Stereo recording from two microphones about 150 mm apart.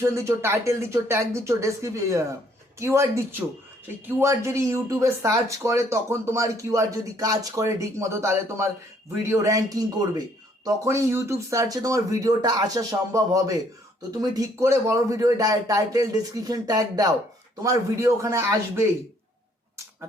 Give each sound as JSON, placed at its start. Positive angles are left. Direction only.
{"t": 0.0, "sound": "speech", "side_deg": -20}